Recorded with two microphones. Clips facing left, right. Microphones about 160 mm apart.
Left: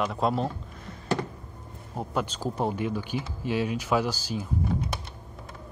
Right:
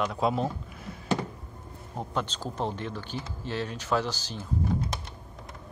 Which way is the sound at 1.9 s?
10° left (ahead or behind).